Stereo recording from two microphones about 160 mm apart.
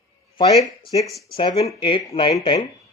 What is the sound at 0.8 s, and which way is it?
Speech, 35° left (ahead or behind).